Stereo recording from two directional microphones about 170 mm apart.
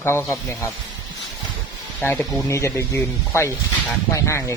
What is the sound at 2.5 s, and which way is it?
A man's voice, 15° left (ahead or behind).